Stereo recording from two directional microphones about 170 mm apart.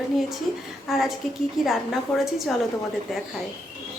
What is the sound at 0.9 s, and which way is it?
A woman's voice, centre (ahead or behind).